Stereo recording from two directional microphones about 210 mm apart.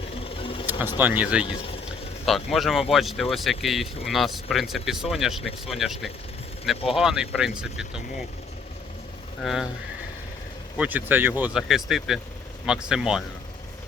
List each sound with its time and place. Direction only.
0.3 s vehicle: 25° left (ahead or behind)
0.9 s speech: 10° right (ahead or behind)
1.5 s speech: 25° left (ahead or behind)
2.2 s speech: centre (ahead or behind)
9.4 s speech: centre (ahead or behind)
10.8 s speech: 10° right (ahead or behind)